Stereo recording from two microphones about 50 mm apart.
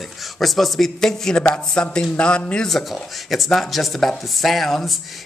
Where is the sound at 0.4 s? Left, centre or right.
Centre.